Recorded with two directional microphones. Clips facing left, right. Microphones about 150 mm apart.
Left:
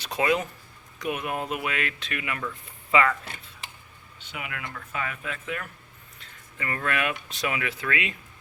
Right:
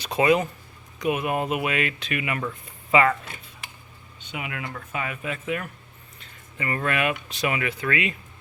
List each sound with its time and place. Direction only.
0.2 s speech: 10° right (ahead or behind)
2.4 s speech: 25° right (ahead or behind)
4.3 s speech: 25° right (ahead or behind); by 8.1 s centre (ahead or behind)